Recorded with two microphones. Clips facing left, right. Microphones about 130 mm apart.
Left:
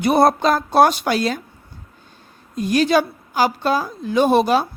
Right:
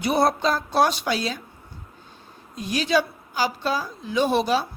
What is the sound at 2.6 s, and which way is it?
A woman's voice, 50° left (ahead or behind).